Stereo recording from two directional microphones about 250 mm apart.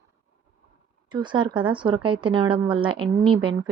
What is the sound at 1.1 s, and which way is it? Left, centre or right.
Speech, centre.